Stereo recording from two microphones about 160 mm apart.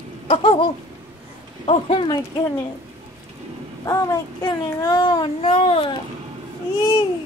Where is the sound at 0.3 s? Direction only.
35° left (ahead or behind).